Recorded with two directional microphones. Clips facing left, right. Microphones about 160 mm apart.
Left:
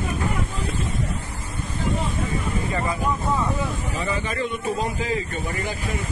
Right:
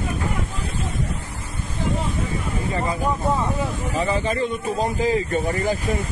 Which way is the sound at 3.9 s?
35° right (ahead or behind).